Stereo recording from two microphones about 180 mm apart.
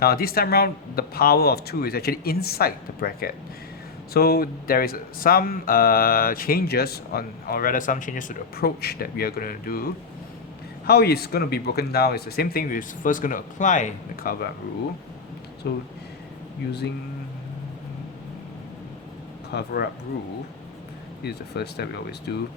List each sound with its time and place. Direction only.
0.0 s speech: 55° left (ahead or behind)
15.6 s speech: 60° left (ahead or behind)
19.5 s speech: 65° left (ahead or behind)
21.2 s speech: 65° left (ahead or behind)